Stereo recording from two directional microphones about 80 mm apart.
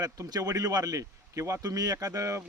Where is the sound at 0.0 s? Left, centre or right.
Right.